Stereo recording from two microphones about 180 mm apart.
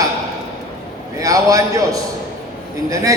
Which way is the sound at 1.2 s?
20° right (ahead or behind).